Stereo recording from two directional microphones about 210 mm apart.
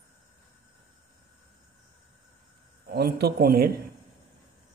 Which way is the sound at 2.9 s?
50° right (ahead or behind).